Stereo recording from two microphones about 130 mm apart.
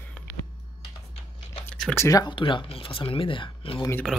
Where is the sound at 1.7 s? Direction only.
10° left (ahead or behind).